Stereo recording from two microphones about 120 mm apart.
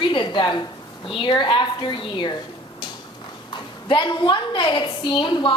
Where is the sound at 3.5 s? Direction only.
40° left (ahead or behind).